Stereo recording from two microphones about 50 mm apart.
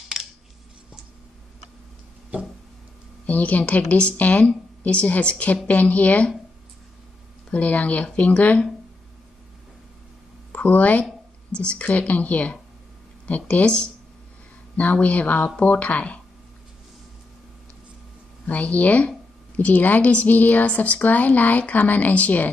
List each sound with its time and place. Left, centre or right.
0.2 s a sound: centre
3.3 s a woman's voice: left
7.5 s a woman's voice: left
10.5 s a woman's voice: left
18.4 s a woman's voice: left